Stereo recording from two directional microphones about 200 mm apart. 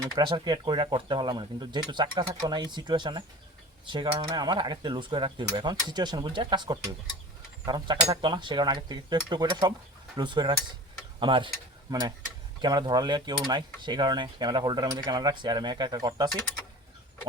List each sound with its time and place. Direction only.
0.2 s speech: 20° right (ahead or behind)